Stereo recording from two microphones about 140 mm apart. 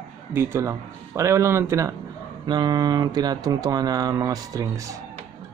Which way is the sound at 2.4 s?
30° right (ahead or behind).